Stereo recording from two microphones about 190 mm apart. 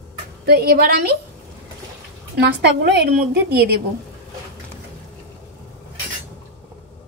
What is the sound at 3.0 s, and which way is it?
Speech, 55° right (ahead or behind).